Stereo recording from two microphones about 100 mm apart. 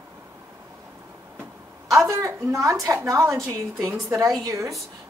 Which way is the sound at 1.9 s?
30° right (ahead or behind).